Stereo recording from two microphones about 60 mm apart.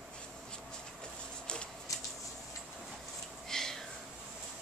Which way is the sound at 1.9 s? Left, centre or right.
Left.